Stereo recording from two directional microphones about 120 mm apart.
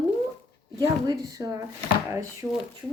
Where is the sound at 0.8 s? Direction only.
30° right (ahead or behind).